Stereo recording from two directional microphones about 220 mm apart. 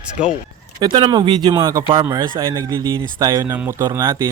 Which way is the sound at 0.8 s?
20° right (ahead or behind).